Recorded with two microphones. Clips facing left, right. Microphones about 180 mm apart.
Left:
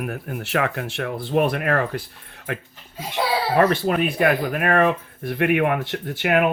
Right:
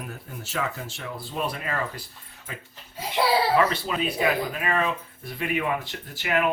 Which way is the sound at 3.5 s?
55° left (ahead or behind).